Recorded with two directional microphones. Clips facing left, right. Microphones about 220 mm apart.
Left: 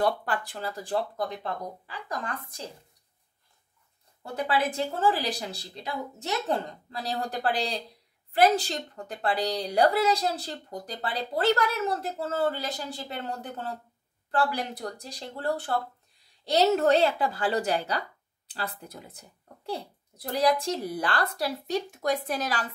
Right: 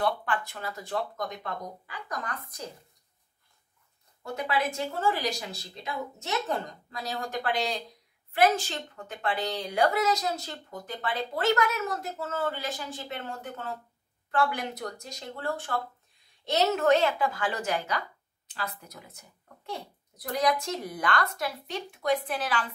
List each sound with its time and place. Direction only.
0.0 s a woman's voice: 40° left (ahead or behind)
4.2 s a woman's voice: 30° left (ahead or behind)